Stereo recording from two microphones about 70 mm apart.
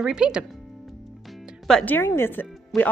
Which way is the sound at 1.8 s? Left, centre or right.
Left.